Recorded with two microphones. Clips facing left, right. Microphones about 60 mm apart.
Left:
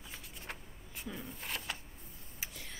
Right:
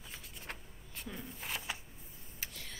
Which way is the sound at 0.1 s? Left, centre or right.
Centre.